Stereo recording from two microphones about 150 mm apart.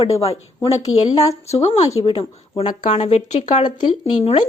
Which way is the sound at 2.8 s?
45° left (ahead or behind).